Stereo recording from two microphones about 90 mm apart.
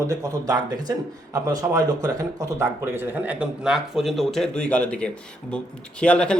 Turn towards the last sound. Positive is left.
turn(degrees=10)  # may be behind; listen again after turning